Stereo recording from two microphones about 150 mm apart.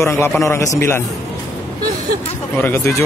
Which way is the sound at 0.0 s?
15° left (ahead or behind).